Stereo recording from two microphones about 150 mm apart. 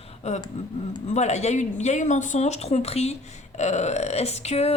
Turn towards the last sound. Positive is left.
turn(degrees=45)  # may be behind; listen again after turning